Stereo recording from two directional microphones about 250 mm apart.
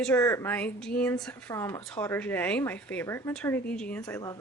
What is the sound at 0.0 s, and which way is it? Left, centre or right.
A woman's voice, centre.